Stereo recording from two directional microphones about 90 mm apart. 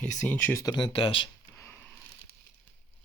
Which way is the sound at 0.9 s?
80° left.